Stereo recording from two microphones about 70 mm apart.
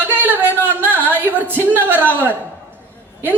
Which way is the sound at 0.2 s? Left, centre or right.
Right.